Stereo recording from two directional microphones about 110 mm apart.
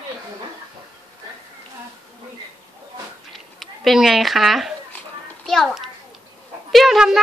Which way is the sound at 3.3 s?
Centre (ahead or behind).